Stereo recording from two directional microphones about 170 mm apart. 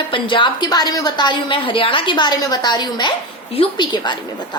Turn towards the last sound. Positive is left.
turn(degrees=30)  # may be behind; listen again after turning